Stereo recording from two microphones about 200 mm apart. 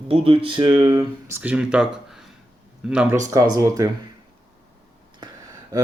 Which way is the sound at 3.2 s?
20° right (ahead or behind).